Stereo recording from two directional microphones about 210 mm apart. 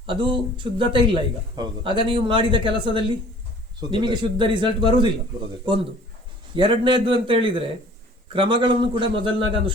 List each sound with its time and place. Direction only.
0.0 s a man's voice: 25° right (ahead or behind)
6.6 s a man's voice: 25° right (ahead or behind)